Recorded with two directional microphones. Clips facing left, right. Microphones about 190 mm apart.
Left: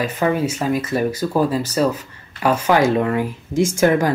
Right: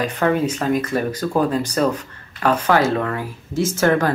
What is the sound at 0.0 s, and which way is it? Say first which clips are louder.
Speech: even; 5° left (ahead or behind).